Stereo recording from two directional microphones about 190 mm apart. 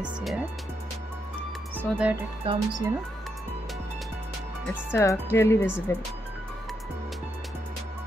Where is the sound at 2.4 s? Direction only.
30° right (ahead or behind).